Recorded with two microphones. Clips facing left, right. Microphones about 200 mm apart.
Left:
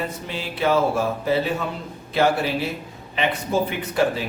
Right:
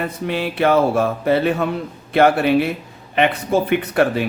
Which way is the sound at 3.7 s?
60° right (ahead or behind).